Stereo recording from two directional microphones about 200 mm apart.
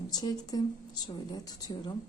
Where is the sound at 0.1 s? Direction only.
20° left (ahead or behind).